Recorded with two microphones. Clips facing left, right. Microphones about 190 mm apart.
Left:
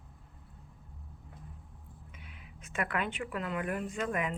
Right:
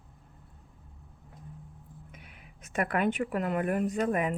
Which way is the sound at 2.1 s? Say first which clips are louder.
Right 1 dB; 45° right (ahead or behind).